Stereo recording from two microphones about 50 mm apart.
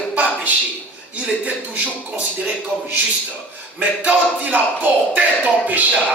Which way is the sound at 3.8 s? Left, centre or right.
Right.